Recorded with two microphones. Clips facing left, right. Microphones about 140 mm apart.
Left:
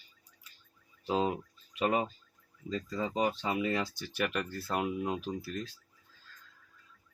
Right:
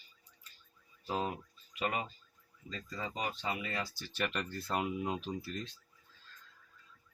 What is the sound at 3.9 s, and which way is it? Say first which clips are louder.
Speech: left 4 dB; 15° left (ahead or behind).